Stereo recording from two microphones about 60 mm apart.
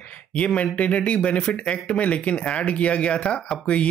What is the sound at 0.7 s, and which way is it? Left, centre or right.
Speech, left.